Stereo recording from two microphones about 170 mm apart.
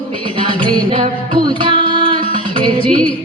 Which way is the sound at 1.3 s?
30° right (ahead or behind).